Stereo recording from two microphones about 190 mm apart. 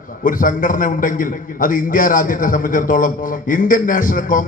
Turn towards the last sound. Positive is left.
turn(degrees=45)  # may be behind; listen again after turning